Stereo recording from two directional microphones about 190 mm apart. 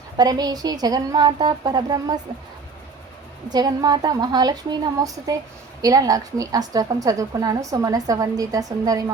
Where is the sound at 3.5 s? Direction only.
20° right (ahead or behind).